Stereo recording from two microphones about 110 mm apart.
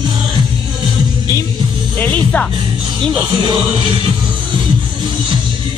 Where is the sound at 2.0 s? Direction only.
15° left (ahead or behind).